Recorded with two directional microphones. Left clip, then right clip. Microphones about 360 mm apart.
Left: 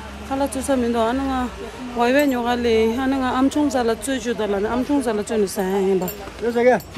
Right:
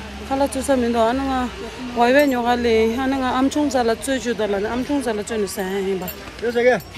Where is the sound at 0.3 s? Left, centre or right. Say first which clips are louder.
Right 2 dB; centre.